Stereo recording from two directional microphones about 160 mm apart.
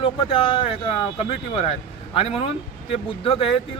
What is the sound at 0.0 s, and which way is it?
Speech, 35° left (ahead or behind).